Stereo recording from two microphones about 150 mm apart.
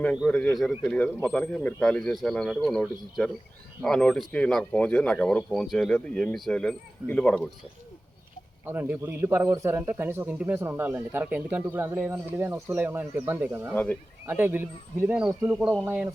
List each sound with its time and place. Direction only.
0.2 s speech: 5° left (ahead or behind)
8.6 s speech: 15° right (ahead or behind)
15.3 s speech: 20° right (ahead or behind)
15.5 s speech: 5° right (ahead or behind)